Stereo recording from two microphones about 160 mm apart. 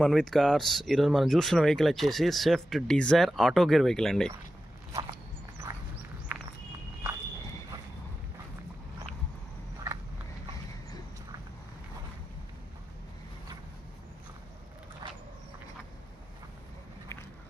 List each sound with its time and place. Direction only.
0.0 s speech: 5° left (ahead or behind)
5.7 s walk: 20° right (ahead or behind)
15.0 s vehicle: 30° right (ahead or behind)